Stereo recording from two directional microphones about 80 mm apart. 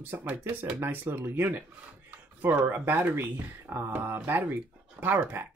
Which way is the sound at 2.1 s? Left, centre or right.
Right.